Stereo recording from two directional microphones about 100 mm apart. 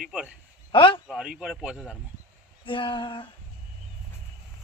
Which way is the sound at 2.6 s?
55° left (ahead or behind).